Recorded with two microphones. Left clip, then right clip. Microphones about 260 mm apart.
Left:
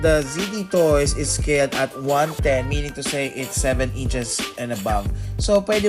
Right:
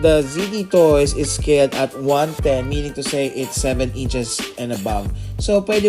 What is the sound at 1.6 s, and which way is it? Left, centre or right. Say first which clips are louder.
Music: right 3 dB; centre.